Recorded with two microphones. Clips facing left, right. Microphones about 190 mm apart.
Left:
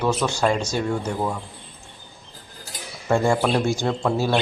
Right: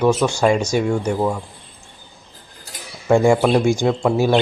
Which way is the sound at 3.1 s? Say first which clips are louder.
Right 6 dB; 15° right (ahead or behind).